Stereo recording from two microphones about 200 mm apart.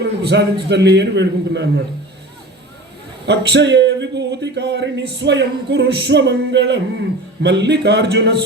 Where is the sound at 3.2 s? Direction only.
60° right (ahead or behind).